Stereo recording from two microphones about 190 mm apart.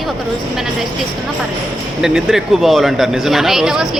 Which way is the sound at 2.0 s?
Centre (ahead or behind).